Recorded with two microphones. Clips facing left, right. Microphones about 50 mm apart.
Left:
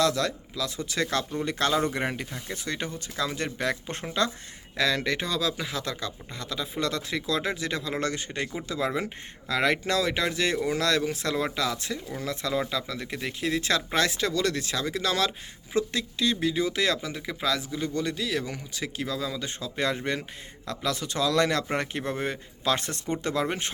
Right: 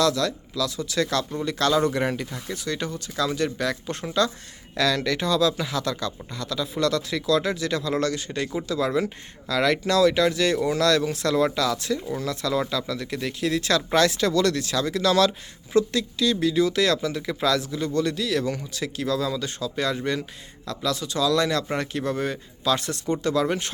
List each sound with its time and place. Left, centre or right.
0.0 s a man's voice: left